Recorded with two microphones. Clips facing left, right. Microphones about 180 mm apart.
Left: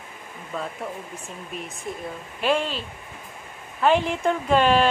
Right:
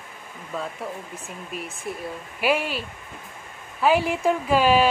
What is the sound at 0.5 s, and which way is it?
Speech, 5° right (ahead or behind).